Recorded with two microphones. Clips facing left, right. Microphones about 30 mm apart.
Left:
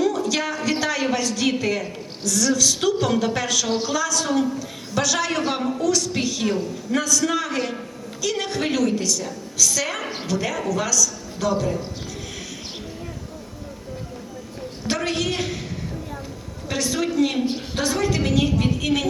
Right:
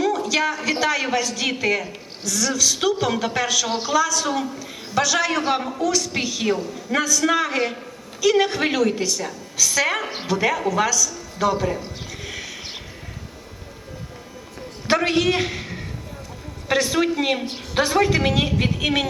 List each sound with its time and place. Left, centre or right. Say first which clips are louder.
0.0 s a man's voice: right 1 dB; centre
14.8 s a man's voice: right 5 dB; right